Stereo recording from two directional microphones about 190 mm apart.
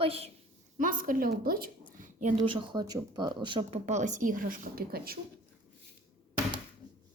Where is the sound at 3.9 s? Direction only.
40° right (ahead or behind).